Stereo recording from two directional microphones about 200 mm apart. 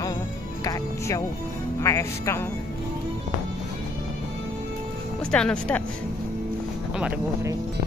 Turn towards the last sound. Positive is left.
turn(degrees=-10)  # may be behind; listen again after turning